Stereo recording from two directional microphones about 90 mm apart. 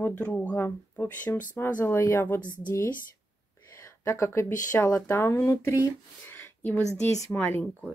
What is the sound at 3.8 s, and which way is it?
Speech, 35° left (ahead or behind).